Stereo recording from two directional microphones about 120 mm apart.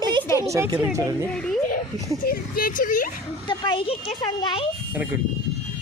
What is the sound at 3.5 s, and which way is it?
Speech, 45° left (ahead or behind).